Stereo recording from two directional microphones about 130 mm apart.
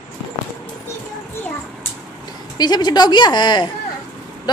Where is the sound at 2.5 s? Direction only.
30° left (ahead or behind).